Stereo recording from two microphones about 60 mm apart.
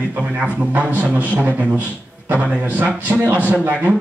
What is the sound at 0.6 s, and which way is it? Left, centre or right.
A man's voice, right.